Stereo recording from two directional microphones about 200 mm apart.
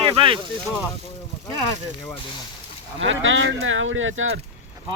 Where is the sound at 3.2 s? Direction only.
75° right (ahead or behind).